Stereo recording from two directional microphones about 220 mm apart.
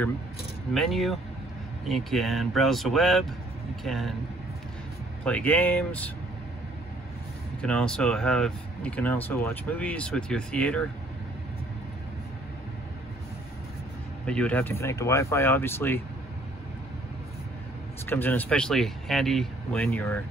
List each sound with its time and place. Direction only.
0.7 s speech: centre (ahead or behind)
5.2 s speech: 5° left (ahead or behind)
7.6 s speech: 5° left (ahead or behind)
14.2 s speech: 5° left (ahead or behind)
18.0 s speech: 10° left (ahead or behind)